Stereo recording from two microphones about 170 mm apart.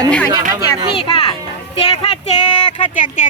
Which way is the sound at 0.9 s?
30° left (ahead or behind).